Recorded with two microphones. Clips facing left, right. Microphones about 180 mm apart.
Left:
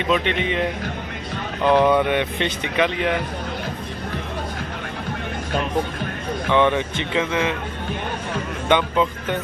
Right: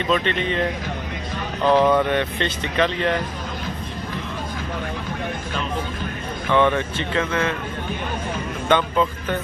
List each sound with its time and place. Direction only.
0.1 s speech: 15° left (ahead or behind)
6.5 s speech: 15° left (ahead or behind)
8.6 s speech: 15° left (ahead or behind)